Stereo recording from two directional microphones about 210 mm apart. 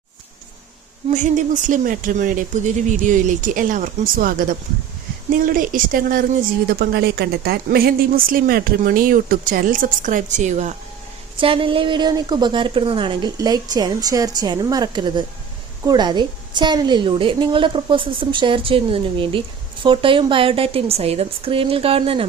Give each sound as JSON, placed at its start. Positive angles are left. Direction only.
{"t": 1.1, "sound": "a woman's voice", "side_deg": -35}